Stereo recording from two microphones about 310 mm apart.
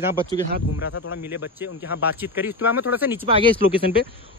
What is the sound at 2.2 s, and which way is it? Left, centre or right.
Speech, centre.